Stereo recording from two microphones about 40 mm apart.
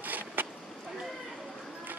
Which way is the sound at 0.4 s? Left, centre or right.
Right.